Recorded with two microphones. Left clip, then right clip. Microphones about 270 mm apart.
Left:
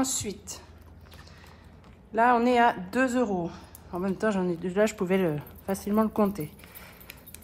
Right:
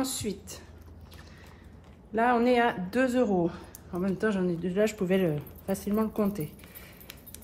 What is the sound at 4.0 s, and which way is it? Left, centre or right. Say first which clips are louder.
Speech: left 1 dB; left.